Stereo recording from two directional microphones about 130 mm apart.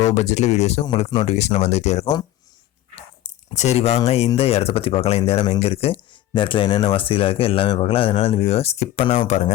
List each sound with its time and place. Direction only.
0.0 s speech: 60° left (ahead or behind)
3.5 s speech: 55° left (ahead or behind)